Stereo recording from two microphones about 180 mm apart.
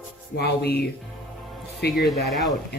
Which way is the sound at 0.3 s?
65° left (ahead or behind).